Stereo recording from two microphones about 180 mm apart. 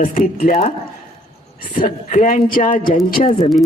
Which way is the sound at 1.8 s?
50° left (ahead or behind).